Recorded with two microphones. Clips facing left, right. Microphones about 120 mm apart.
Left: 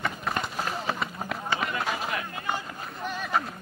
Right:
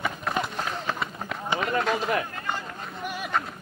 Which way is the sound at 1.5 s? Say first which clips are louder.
Right 6 dB; 5° left (ahead or behind).